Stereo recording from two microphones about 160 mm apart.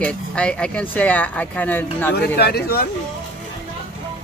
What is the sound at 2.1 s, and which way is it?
Speech, 85° left.